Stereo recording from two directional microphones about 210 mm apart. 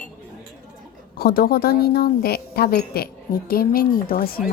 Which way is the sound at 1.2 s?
45° left (ahead or behind).